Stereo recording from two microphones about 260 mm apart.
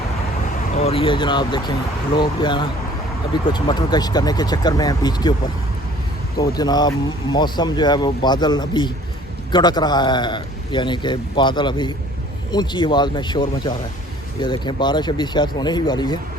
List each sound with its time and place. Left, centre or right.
0.7 s speech: left
6.6 s speech: centre